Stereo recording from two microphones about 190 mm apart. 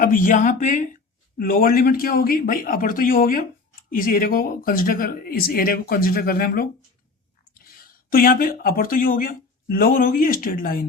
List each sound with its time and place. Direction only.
0.0 s speech: 45° left (ahead or behind)